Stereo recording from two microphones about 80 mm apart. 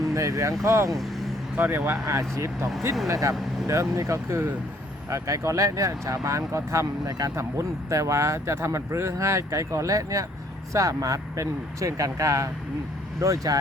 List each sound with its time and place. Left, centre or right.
0.0 s speech: right
0.9 s speech: centre
1.5 s speech: right